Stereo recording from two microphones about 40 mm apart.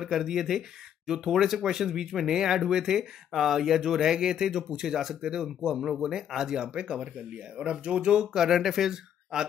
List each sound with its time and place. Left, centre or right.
0.0 s speech: centre